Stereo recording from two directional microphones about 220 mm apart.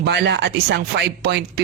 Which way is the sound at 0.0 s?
50° right (ahead or behind).